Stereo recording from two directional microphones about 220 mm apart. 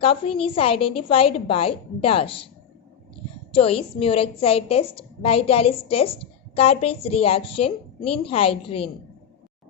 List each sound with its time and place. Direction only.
0.0 s a woman's voice: 25° left (ahead or behind)
3.5 s a woman's voice: 25° left (ahead or behind)